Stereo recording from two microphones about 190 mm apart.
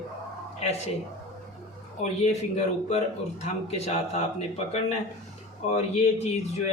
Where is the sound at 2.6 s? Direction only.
35° left (ahead or behind).